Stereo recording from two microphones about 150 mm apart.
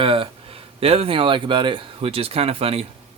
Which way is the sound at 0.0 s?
35° right (ahead or behind).